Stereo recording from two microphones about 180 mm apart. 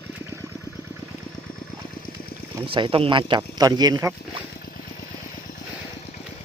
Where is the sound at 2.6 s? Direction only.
25° right (ahead or behind).